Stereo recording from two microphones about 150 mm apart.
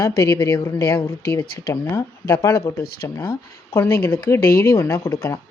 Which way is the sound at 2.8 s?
90° left.